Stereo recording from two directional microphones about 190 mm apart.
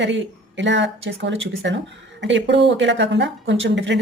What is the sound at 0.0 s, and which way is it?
Speech, 70° right (ahead or behind).